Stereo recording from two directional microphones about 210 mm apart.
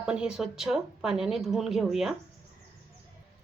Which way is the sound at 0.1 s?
5° right (ahead or behind).